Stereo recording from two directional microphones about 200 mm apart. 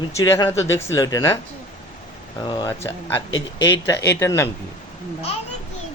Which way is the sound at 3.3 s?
65° left (ahead or behind).